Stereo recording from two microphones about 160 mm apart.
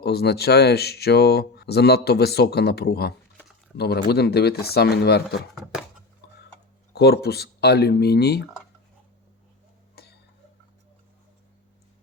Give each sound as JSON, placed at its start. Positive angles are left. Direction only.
{"t": 0.0, "sound": "speech", "side_deg": 90}
{"t": 6.9, "sound": "speech", "side_deg": 90}
{"t": 9.9, "sound": "a sound", "side_deg": 90}